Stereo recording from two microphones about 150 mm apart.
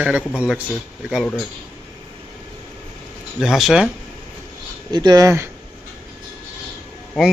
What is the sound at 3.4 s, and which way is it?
Speech, centre (ahead or behind).